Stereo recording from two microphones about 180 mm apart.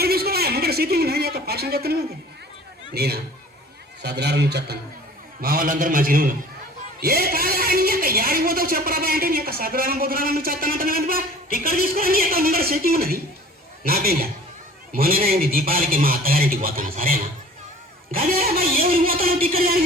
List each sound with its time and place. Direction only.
0.0 s a sound: 60° right (ahead or behind)
2.9 s a man's voice: 60° right (ahead or behind)
5.4 s a man's voice: 55° right (ahead or behind)